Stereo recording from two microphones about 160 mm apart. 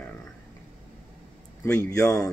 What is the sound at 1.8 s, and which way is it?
Speech, 20° left (ahead or behind).